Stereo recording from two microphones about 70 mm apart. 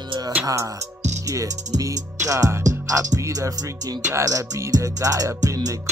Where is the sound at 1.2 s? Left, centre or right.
Right.